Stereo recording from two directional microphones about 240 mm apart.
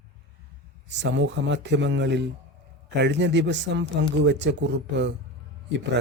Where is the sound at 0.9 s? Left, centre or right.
Right.